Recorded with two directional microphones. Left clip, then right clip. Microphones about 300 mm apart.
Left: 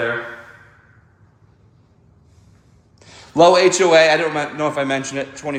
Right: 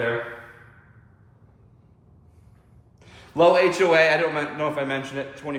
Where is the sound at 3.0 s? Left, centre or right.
Centre.